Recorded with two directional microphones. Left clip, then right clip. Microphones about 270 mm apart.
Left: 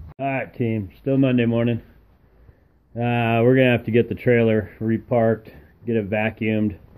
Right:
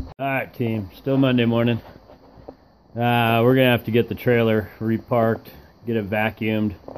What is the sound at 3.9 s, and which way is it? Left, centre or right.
Speech, right.